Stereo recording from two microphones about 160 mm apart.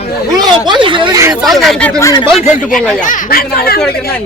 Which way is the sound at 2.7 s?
55° left (ahead or behind).